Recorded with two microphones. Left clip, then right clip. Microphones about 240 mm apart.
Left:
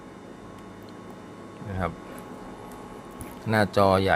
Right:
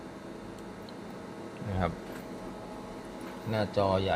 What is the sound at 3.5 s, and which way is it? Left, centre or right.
Speech, left.